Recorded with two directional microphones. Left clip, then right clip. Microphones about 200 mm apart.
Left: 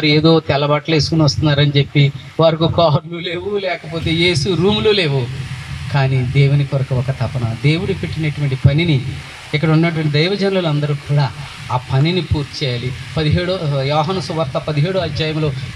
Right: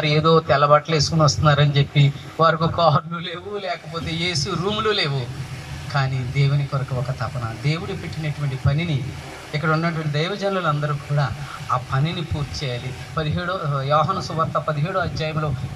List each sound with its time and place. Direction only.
0.0 s a man's voice: 20° left (ahead or behind)
9.5 s a man's voice: 25° left (ahead or behind)